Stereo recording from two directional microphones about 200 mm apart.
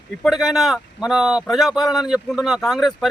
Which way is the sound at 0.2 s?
Centre (ahead or behind).